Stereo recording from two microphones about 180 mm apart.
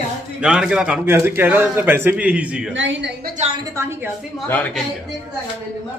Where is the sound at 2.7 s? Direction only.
90° right.